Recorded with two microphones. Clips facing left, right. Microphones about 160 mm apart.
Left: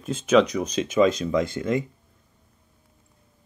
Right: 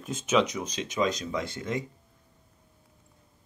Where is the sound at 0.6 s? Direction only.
55° left (ahead or behind).